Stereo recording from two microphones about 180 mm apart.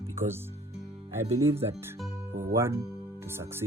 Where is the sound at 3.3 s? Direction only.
15° right (ahead or behind).